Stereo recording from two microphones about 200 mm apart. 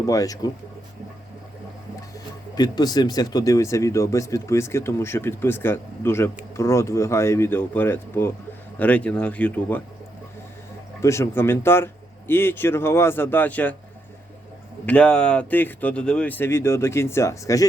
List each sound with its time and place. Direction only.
0.0 s speech: 15° left (ahead or behind)
2.6 s speech: 20° left (ahead or behind)
11.0 s speech: 15° left (ahead or behind)
14.8 s speech: 5° left (ahead or behind)